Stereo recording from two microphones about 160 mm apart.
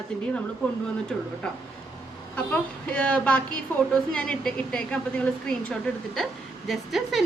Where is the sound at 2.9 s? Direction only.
10° left (ahead or behind).